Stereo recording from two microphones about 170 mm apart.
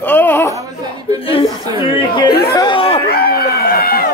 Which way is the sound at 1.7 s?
25° left (ahead or behind).